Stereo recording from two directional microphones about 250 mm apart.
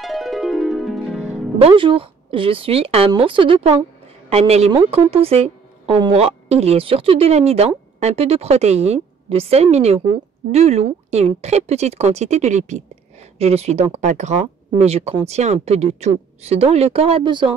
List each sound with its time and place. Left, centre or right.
0.0 s music: centre
1.6 s a woman's voice: right